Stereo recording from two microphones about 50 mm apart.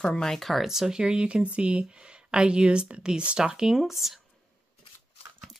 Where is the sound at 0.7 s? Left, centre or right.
Centre.